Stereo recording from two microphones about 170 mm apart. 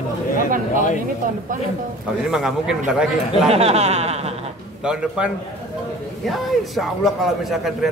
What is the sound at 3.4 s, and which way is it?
Speech, 35° right (ahead or behind).